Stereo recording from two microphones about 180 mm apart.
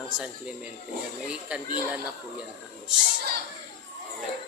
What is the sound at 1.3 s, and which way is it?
Speech, 5° right (ahead or behind).